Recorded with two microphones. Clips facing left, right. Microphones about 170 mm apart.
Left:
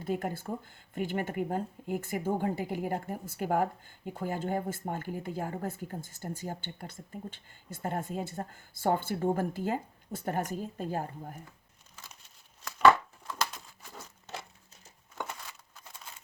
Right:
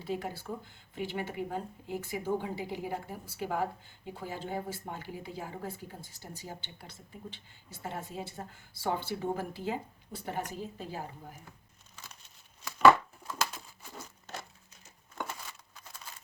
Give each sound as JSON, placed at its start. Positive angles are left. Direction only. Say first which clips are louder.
{"t": 0.0, "sound": "speech", "louder": "left 3 dB", "side_deg": 50}
{"t": 12.6, "sound": "chopping", "louder": "right 1 dB", "side_deg": -5}